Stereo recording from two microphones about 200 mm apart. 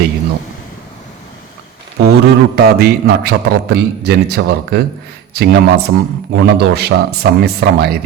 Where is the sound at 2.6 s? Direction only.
55° right (ahead or behind).